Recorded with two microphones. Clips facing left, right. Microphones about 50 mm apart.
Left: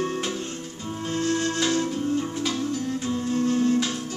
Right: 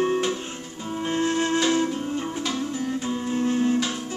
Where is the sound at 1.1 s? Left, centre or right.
Right.